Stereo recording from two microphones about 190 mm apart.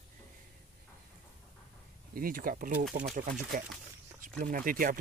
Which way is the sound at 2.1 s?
50° right (ahead or behind).